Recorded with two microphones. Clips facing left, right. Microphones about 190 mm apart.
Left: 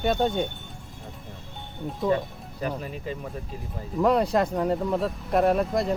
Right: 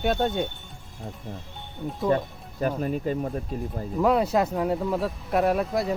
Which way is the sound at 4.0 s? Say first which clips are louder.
Even; centre (ahead or behind).